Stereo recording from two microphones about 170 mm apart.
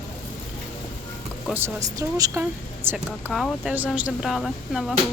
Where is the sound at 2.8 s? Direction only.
Centre (ahead or behind).